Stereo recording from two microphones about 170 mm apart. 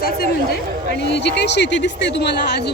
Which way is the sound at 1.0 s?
90° left.